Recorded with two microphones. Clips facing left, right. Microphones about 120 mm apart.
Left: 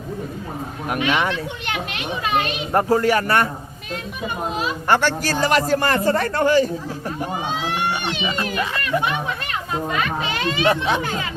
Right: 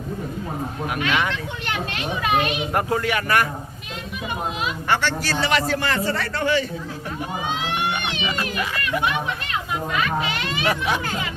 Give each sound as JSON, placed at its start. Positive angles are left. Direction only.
{"t": 0.9, "sound": "speech", "side_deg": 15}
{"t": 2.4, "sound": "speech", "side_deg": 35}
{"t": 4.5, "sound": "a man's voice", "side_deg": 40}
{"t": 8.2, "sound": "a child's voice", "side_deg": 25}